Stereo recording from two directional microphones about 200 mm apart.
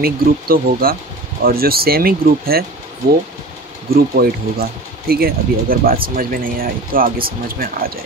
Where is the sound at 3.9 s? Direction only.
50° right (ahead or behind).